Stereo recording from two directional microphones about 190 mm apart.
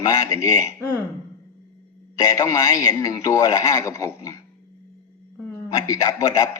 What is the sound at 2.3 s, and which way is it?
A man's voice, 15° left (ahead or behind).